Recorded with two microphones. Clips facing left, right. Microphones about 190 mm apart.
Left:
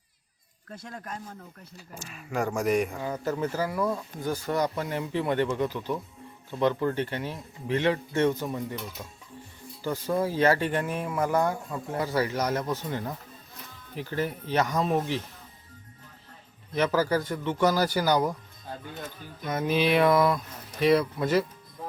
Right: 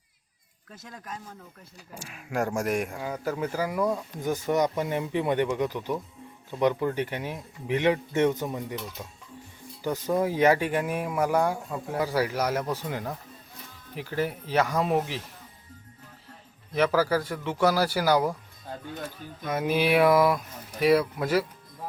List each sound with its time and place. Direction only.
0.9 s speech: 5° right (ahead or behind); by 8.6 s 20° right (ahead or behind)
9.8 s speech: 15° right (ahead or behind)
16.7 s speech: 5° right (ahead or behind)